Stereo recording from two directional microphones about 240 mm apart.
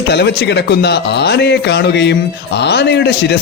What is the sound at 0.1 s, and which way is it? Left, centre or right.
A man's voice, left.